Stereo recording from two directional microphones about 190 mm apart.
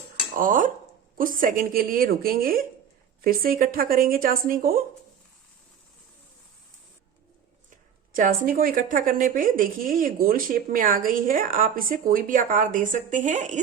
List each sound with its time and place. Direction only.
0.3 s speech: 45° right (ahead or behind)
8.1 s speech: 45° right (ahead or behind)